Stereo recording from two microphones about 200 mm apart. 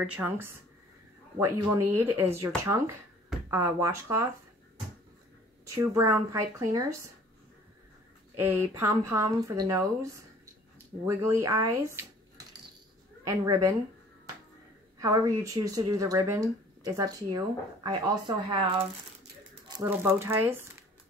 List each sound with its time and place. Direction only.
0.0 s speech: 10° right (ahead or behind)
5.8 s speech: 15° right (ahead or behind)
8.4 s speech: 15° right (ahead or behind)
11.2 s speech: 15° right (ahead or behind)
13.2 s speech: 15° right (ahead or behind)
15.0 s speech: 15° right (ahead or behind)
19.7 s speech: 10° right (ahead or behind)